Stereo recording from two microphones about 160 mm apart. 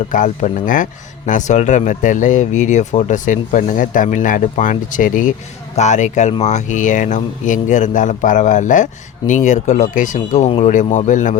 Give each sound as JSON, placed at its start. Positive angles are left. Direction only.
{"t": 0.1, "sound": "a man's voice", "side_deg": 55}